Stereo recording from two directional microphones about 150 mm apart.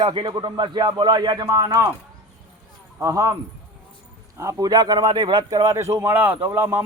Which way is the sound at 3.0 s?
20° right (ahead or behind).